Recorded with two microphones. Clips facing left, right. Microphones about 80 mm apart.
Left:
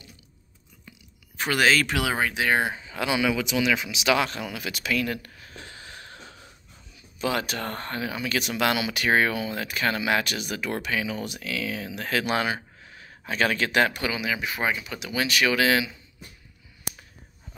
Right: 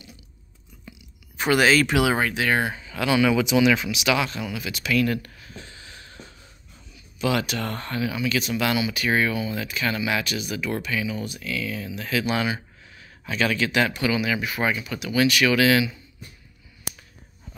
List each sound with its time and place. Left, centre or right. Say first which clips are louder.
0.8 s a sound: right 5 dB; centre
2.3 s speech: right 1 dB; centre
3.3 s speech: right 6 dB; centre
3.9 s speech: even; left
4.3 s speech: right 2 dB; left
4.9 s speech: right 6 dB; left
5.4 s a sound: even; left
7.2 s speech: right 3 dB; left
14.1 s speech: right 4 dB; centre